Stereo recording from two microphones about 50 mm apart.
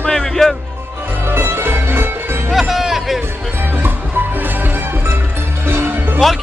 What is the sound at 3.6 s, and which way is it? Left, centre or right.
Music, right.